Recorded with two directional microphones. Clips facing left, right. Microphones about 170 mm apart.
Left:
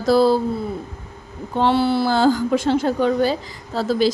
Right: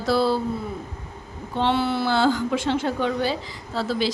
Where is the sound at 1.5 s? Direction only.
40° left (ahead or behind).